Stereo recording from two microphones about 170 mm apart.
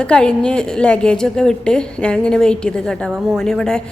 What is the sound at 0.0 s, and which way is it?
Speech, 5° left (ahead or behind).